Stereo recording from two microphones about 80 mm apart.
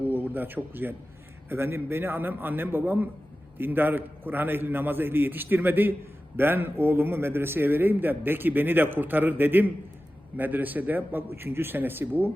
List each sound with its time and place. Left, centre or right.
0.0 s a man's voice: right